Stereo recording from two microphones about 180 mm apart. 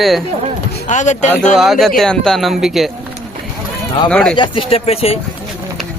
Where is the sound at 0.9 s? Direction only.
40° left (ahead or behind).